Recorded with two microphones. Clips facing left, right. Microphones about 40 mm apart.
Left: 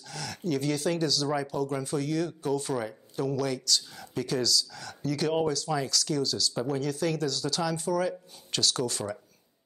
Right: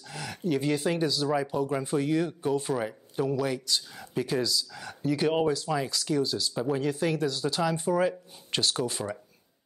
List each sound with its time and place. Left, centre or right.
0.1 s speech: right